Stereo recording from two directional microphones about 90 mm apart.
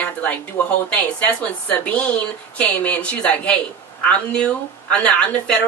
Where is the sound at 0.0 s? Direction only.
15° left (ahead or behind).